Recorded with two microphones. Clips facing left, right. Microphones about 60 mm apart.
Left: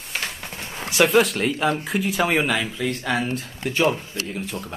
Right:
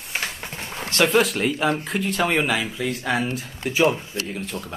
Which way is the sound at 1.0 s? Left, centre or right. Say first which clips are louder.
Left 1 dB; centre.